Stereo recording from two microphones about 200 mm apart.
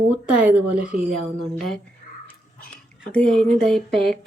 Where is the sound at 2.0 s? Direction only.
45° left (ahead or behind).